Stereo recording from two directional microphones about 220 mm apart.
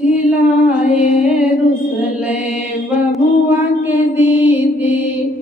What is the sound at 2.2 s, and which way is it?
Mantra, 5° right (ahead or behind).